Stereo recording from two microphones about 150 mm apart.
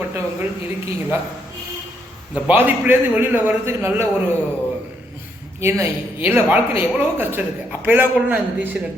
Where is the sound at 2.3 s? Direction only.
10° right (ahead or behind).